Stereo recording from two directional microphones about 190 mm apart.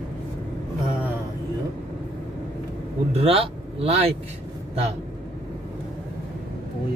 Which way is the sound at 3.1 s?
30° right (ahead or behind).